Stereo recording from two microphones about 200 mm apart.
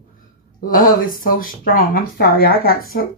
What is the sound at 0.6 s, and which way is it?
Speech, 45° left (ahead or behind).